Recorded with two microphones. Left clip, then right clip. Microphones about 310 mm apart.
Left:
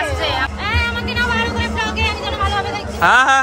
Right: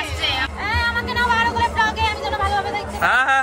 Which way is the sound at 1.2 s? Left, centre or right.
Right.